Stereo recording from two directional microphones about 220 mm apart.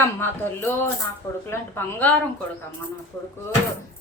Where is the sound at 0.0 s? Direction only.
10° left (ahead or behind).